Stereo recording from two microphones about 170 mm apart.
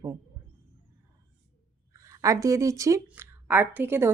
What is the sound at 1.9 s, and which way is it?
A woman's voice, 20° right (ahead or behind).